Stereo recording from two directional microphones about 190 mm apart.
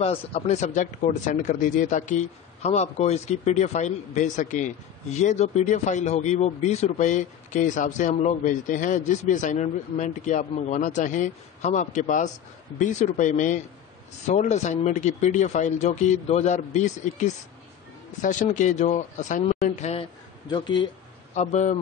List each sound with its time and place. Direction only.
0.0 s speech: 30° left (ahead or behind)
21.4 s speech: 40° left (ahead or behind)